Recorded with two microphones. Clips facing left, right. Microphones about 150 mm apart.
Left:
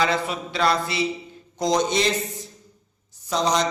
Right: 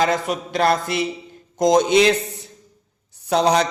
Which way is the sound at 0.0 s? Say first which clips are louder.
Right 3 dB; 45° right (ahead or behind).